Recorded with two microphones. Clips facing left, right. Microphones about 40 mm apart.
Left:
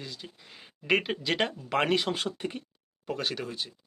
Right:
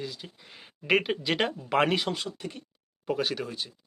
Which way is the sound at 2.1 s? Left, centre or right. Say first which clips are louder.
Left 2 dB; left.